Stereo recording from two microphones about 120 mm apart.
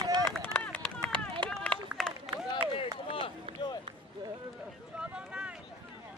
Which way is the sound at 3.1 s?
50° left (ahead or behind).